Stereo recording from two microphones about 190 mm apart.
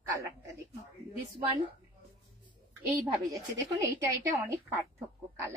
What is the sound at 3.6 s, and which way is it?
A woman's voice, 15° right (ahead or behind).